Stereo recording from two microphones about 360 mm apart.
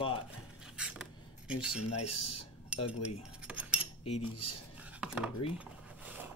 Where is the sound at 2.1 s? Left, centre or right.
Left.